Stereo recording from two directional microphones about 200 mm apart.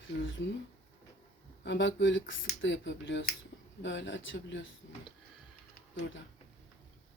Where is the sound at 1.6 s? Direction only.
65° left (ahead or behind).